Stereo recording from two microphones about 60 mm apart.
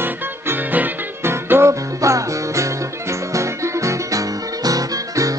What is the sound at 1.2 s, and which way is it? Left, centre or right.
Music, right.